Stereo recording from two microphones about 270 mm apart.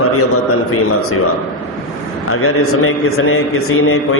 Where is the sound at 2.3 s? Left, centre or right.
Left.